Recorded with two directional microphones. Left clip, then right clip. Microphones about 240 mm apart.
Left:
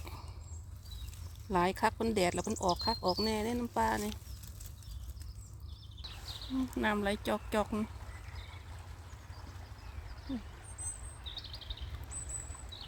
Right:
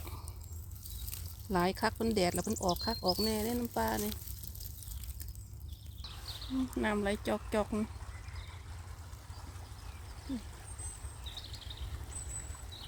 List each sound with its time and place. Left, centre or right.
0.0 s dog: centre
1.5 s speech: centre
6.0 s speech: centre